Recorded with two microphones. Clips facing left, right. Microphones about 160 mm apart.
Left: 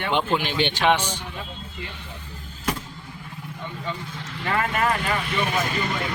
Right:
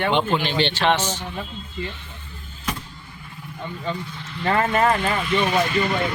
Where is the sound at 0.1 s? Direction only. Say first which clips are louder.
Right 2 dB; 5° left (ahead or behind).